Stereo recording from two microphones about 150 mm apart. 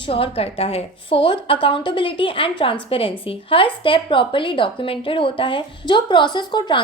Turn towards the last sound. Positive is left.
turn(degrees=30)  # may be behind; listen again after turning